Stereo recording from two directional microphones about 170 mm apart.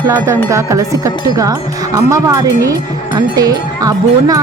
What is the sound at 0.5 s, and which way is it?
Speech, 20° right (ahead or behind).